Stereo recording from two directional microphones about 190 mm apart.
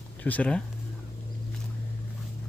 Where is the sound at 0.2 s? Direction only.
10° left (ahead or behind).